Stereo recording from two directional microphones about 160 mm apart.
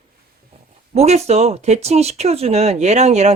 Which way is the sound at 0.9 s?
45° right (ahead or behind).